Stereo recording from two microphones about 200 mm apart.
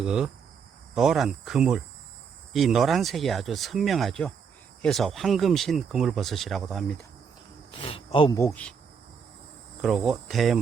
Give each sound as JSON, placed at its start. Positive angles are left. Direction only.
{"t": 0.0, "sound": "speech", "side_deg": -5}
{"t": 7.7, "sound": "speech", "side_deg": 25}
{"t": 8.4, "sound": "insect", "side_deg": 10}
{"t": 9.8, "sound": "speech", "side_deg": 0}